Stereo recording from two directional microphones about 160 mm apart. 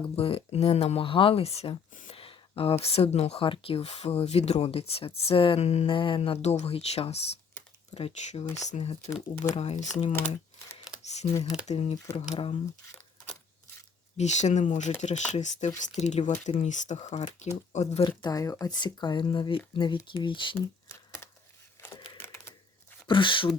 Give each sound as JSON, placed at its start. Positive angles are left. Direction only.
{"t": 0.0, "sound": "speech", "side_deg": 35}
{"t": 10.1, "sound": "speech", "side_deg": 15}
{"t": 11.0, "sound": "computer keyboard", "side_deg": 45}
{"t": 11.6, "sound": "speech", "side_deg": 45}
{"t": 14.2, "sound": "speech", "side_deg": 45}
{"t": 18.2, "sound": "speech", "side_deg": 20}
{"t": 20.9, "sound": "a sound", "side_deg": 15}
{"t": 21.9, "sound": "typing", "side_deg": 30}
{"t": 22.2, "sound": "a sound", "side_deg": 15}
{"t": 23.0, "sound": "speech", "side_deg": 30}